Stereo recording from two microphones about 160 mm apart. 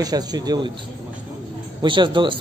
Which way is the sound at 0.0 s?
25° right (ahead or behind).